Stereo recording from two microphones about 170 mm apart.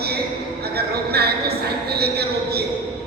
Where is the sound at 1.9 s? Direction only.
70° right (ahead or behind).